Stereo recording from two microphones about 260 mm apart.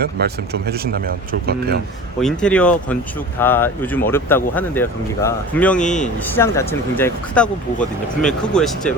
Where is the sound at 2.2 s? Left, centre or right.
Centre.